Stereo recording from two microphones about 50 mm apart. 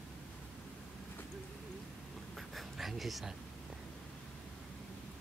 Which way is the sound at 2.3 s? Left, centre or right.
Centre.